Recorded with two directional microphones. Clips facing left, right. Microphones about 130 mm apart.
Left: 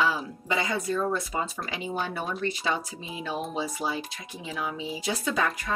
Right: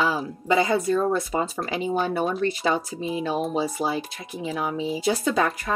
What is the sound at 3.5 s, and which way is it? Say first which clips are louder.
Speech: right 5 dB; 40° right (ahead or behind).